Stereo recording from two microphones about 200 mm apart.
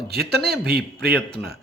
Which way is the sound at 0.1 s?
50° right (ahead or behind).